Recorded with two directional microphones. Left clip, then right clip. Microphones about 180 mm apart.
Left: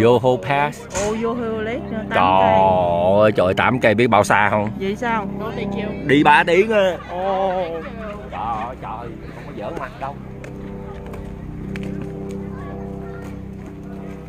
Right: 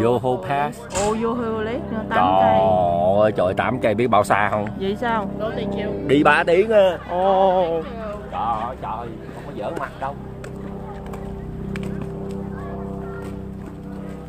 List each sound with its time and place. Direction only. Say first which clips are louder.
0.0 s speech: left 5 dB; 45° left (ahead or behind)
1.1 s speech: even; 5° right (ahead or behind)
2.1 s speech: left 2 dB; 45° left (ahead or behind)
4.6 s speech: left 1 dB; centre (ahead or behind)
5.6 s speech: right 1 dB; 50° left (ahead or behind)
7.2 s speech: right 6 dB; 15° right (ahead or behind)
8.4 s speech: right 1 dB; 15° left (ahead or behind)